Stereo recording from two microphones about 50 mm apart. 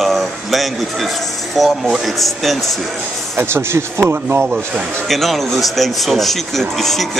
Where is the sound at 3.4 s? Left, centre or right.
Right.